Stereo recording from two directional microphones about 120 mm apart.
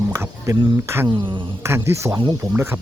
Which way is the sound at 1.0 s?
40° right (ahead or behind).